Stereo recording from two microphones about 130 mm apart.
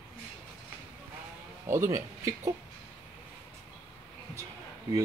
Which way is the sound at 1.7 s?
20° right (ahead or behind).